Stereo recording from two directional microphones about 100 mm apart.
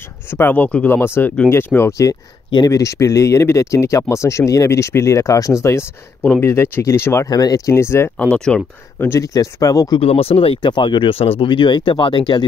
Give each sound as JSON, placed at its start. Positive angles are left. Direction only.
{"t": 0.3, "sound": "speech", "side_deg": 20}
{"t": 0.8, "sound": "speech", "side_deg": 25}
{"t": 7.2, "sound": "speech", "side_deg": 40}
{"t": 8.2, "sound": "speech", "side_deg": 10}
{"t": 8.9, "sound": "speech", "side_deg": 30}
{"t": 9.9, "sound": "speech", "side_deg": 75}